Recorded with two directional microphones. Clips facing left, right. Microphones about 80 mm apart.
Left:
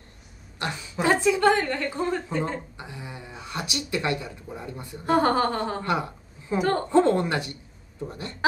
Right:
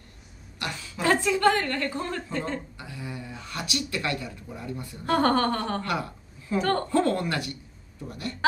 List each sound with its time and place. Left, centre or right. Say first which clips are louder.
0.6 s a woman's voice: left 3 dB; left
5.1 s a woman's voice: left 1 dB; centre